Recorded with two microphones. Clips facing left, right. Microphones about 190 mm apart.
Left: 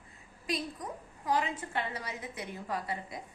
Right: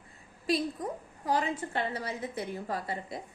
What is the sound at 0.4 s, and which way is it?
A woman's voice, 30° right (ahead or behind).